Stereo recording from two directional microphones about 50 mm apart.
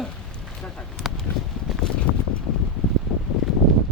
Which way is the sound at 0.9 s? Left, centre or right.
Centre.